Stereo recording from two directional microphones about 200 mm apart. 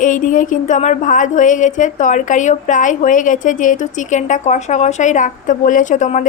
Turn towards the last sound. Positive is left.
turn(degrees=40)  # may be behind; listen again after turning